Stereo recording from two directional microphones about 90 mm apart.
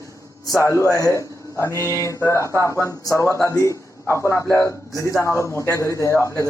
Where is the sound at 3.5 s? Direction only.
30° left (ahead or behind).